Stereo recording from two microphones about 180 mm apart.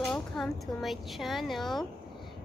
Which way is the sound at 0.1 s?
Centre (ahead or behind).